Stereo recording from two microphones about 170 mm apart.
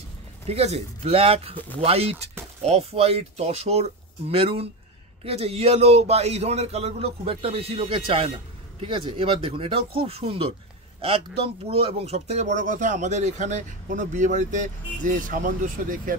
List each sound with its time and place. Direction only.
0.5 s speech: 35° right (ahead or behind); by 16.2 s 50° right (ahead or behind)